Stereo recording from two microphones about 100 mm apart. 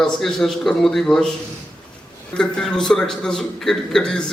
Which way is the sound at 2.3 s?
5° left (ahead or behind).